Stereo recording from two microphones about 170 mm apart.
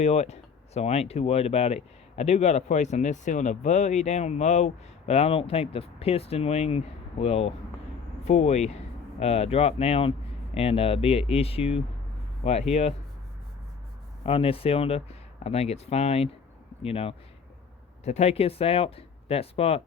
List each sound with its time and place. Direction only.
0.0 s speech: 40° left (ahead or behind)
14.3 s speech: 35° left (ahead or behind)